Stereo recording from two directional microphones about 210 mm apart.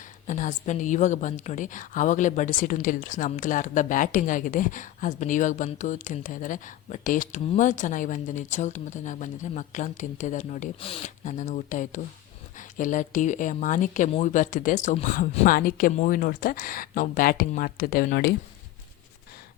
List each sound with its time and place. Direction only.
0.3 s a woman's voice: 35° left (ahead or behind)